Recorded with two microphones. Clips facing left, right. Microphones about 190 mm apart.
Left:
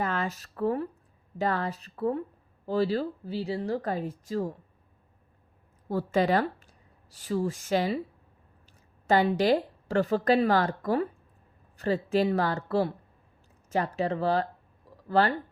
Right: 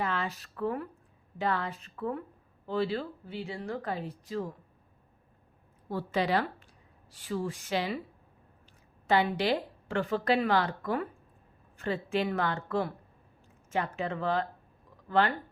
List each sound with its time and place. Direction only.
0.0 s speech: 45° left (ahead or behind)
5.9 s speech: 45° left (ahead or behind)
9.0 s speech: 45° left (ahead or behind)